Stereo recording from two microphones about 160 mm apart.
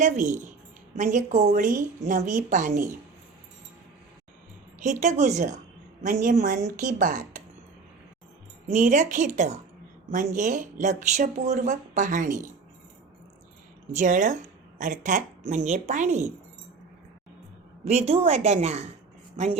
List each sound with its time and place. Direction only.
0.0 s speech: 50° right (ahead or behind)
4.8 s speech: 50° right (ahead or behind)
8.7 s speech: 50° right (ahead or behind)
13.9 s a woman's voice: 50° right (ahead or behind)
17.8 s a woman's voice: 40° right (ahead or behind)